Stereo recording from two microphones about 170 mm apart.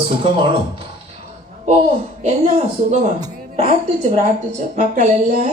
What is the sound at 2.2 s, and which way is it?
A man's voice, 40° right (ahead or behind).